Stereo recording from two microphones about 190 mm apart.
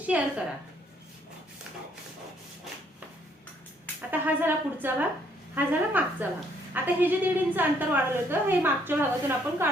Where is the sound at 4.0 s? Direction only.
10° right (ahead or behind).